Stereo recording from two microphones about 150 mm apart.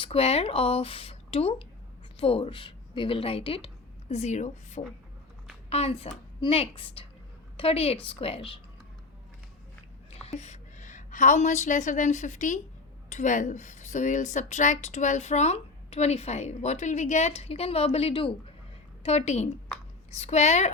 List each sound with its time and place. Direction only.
0.0 s a woman's voice: 40° left (ahead or behind)
10.1 s a woman's voice: 45° left (ahead or behind)
19.0 s a woman's voice: 50° left (ahead or behind)